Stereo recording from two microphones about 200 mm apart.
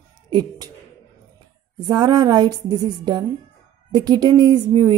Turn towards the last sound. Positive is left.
turn(degrees=-20)  # may be behind; listen again after turning